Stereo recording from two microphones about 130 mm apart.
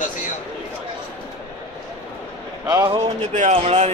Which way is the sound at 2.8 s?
45° right (ahead or behind).